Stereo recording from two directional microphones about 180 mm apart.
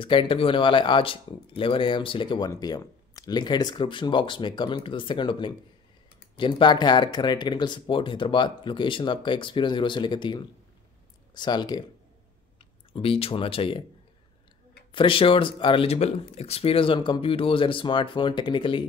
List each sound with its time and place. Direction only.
0.0 s speech: 30° left (ahead or behind)
12.9 s speech: 30° left (ahead or behind)
14.9 s speech: 30° left (ahead or behind)